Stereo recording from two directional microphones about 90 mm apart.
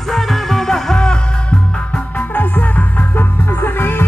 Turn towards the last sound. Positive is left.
turn(degrees=25)  # may be behind; listen again after turning